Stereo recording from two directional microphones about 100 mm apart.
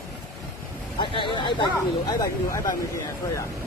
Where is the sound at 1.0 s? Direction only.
55° left (ahead or behind).